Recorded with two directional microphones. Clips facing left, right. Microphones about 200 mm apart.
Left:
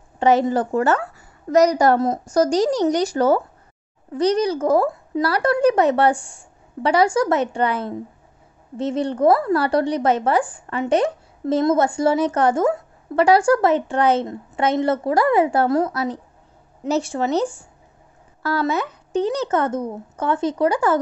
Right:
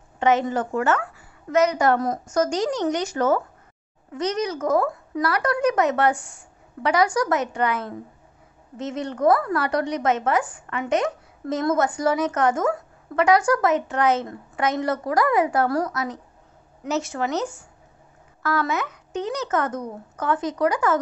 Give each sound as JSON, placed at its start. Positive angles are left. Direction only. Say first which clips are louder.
{"t": 0.2, "sound": "a woman's voice", "louder": "left 4 dB", "side_deg": 35}